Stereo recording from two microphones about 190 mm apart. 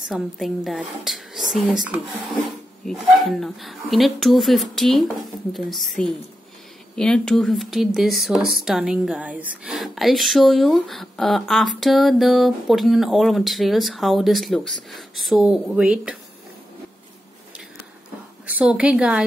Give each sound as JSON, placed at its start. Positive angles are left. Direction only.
{"t": 0.1, "sound": "speech", "side_deg": 0}
{"t": 18.5, "sound": "speech", "side_deg": -5}